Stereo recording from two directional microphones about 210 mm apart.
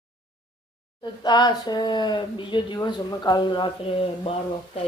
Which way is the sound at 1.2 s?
20° left (ahead or behind).